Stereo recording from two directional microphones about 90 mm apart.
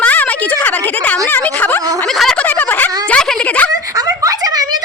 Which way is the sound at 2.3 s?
20° left (ahead or behind).